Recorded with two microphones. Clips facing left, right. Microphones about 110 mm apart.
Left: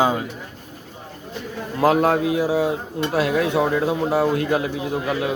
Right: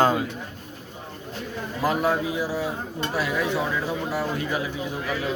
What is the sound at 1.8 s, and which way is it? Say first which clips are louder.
A man's voice: left 6 dB; 70° left (ahead or behind).